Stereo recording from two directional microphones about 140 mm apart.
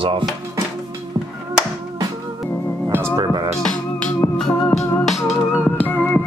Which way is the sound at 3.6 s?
5° left (ahead or behind).